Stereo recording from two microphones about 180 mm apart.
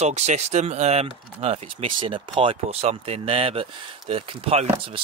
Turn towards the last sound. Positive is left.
turn(degrees=-30)  # may be behind; listen again after turning